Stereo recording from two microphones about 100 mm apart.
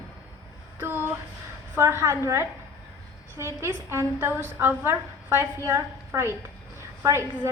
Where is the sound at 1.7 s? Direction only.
25° right (ahead or behind).